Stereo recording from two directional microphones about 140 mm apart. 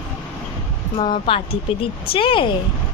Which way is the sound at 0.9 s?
35° left (ahead or behind).